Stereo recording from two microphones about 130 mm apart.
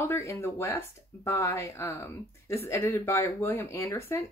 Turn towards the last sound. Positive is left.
turn(degrees=20)  # may be behind; listen again after turning